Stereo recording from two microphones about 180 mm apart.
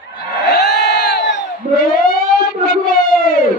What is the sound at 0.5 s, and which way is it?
Crowd, 65° left (ahead or behind).